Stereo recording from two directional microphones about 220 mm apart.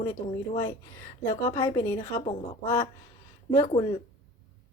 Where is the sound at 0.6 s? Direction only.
10° left (ahead or behind).